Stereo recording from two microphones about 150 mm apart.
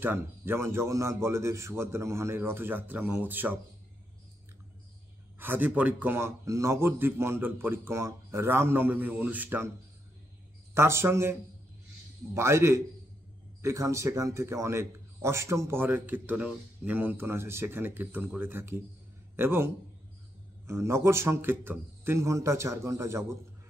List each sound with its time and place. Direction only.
0.0 s a man's voice: 15° right (ahead or behind)
5.4 s a man's voice: 10° right (ahead or behind)
10.7 s a man's voice: 15° right (ahead or behind)
12.4 s a man's voice: 20° right (ahead or behind)